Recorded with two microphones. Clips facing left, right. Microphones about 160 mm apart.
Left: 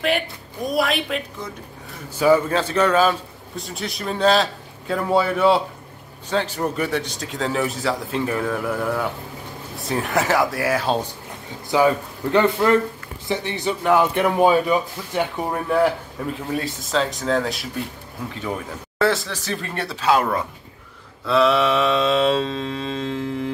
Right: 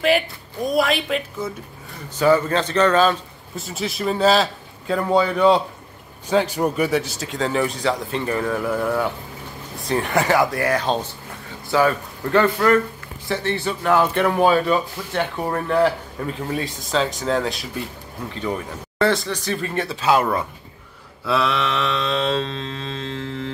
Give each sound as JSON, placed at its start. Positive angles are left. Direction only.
{"t": 0.0, "sound": "a man's voice", "side_deg": 0}
{"t": 3.5, "sound": "speech", "side_deg": 0}
{"t": 6.2, "sound": "speech", "side_deg": -10}
{"t": 11.7, "sound": "a man's voice", "side_deg": 15}